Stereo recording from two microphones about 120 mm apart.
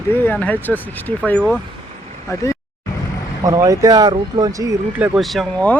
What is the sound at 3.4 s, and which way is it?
Speech, 30° right (ahead or behind).